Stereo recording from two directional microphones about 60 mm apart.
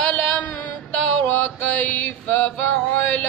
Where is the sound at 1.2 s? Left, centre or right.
Left.